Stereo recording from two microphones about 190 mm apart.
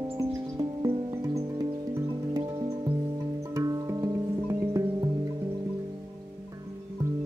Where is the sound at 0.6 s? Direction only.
20° right (ahead or behind).